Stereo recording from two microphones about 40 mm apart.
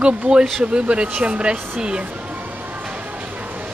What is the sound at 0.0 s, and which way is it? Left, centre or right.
Speech, right.